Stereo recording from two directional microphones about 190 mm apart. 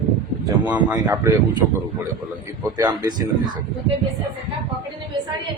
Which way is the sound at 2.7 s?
20° right (ahead or behind).